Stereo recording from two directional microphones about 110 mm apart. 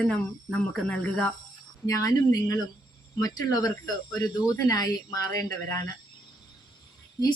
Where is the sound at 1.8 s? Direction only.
35° left (ahead or behind).